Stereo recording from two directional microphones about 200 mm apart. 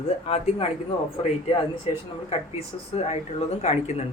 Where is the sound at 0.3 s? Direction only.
30° left (ahead or behind).